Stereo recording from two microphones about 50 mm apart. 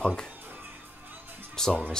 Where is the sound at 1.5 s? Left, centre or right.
Centre.